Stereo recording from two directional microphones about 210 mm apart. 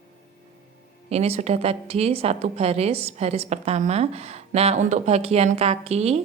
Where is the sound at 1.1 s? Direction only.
30° right (ahead or behind).